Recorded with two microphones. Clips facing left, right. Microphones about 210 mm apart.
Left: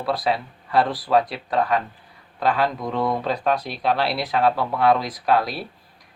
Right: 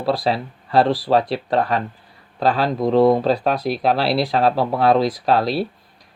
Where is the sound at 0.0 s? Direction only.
30° right (ahead or behind).